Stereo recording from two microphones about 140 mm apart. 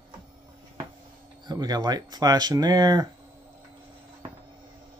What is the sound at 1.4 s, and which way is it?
Speech, 30° right (ahead or behind).